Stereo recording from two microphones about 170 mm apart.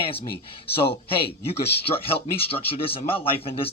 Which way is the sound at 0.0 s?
35° left (ahead or behind).